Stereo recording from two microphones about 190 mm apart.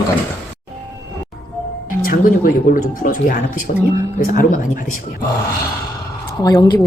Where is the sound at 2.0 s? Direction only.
45° left (ahead or behind).